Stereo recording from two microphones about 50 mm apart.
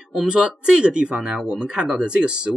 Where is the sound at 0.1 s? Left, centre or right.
Centre.